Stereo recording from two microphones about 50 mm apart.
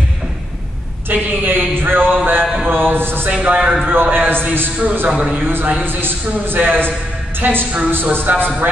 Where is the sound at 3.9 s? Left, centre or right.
Right.